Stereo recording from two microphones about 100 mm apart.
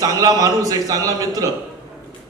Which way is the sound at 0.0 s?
35° right (ahead or behind).